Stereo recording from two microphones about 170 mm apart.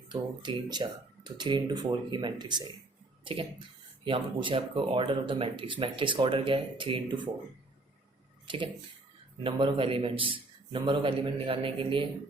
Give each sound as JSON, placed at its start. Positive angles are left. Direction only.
{"t": 0.1, "sound": "speech", "side_deg": -25}
{"t": 4.0, "sound": "speech", "side_deg": -30}
{"t": 8.4, "sound": "a man's voice", "side_deg": -30}